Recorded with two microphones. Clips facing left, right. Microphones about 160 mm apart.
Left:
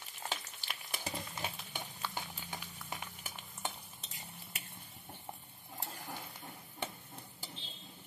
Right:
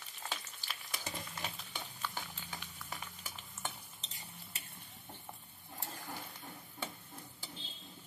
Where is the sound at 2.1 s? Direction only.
20° left (ahead or behind).